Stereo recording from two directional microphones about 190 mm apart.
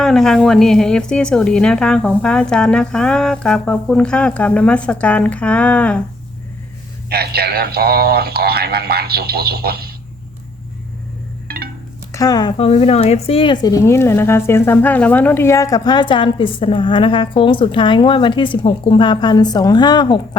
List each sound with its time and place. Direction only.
0.0 s a woman's voice: centre (ahead or behind)
7.1 s speech: 55° right (ahead or behind)
11.4 s wind chime: 55° right (ahead or behind)
12.1 s speech: 20° left (ahead or behind)